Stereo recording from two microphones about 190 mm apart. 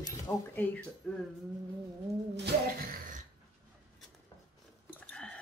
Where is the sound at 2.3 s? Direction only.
55° right (ahead or behind).